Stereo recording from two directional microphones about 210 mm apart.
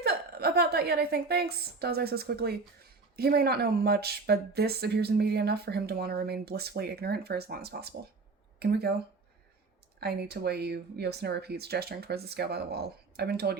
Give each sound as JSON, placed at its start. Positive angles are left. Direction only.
{"t": 0.0, "sound": "a woman's voice", "side_deg": -50}
{"t": 10.0, "sound": "speech", "side_deg": -50}